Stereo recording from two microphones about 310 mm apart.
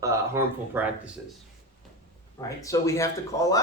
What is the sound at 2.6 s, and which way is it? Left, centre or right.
Speech, centre.